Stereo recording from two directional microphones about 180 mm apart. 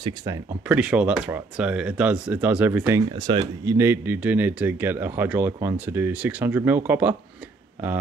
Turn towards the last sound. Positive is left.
turn(degrees=-10)  # may be behind; listen again after turning